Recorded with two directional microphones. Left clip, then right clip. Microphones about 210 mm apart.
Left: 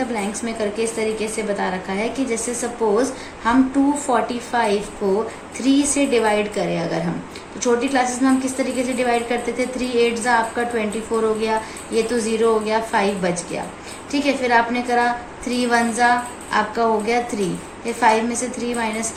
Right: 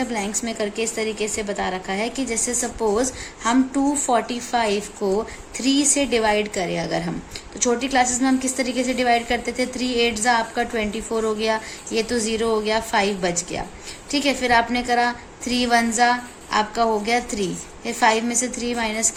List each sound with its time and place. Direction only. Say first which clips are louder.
0.1 s a woman's voice: left 1 dB; 45° right (ahead or behind)